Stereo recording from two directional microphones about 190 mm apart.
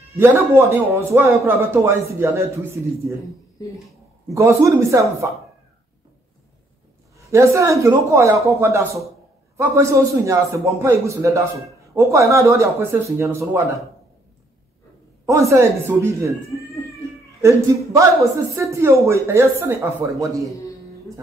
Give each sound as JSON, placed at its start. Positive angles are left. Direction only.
{"t": 0.1, "sound": "a man's voice", "side_deg": -15}
{"t": 4.3, "sound": "a man's voice", "side_deg": -15}
{"t": 7.2, "sound": "a man's voice", "side_deg": -15}
{"t": 15.2, "sound": "speech", "side_deg": -15}
{"t": 18.5, "sound": "a man's voice", "side_deg": -15}